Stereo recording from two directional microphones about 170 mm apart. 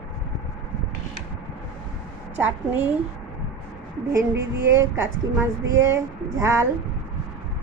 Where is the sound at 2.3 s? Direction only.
10° right (ahead or behind).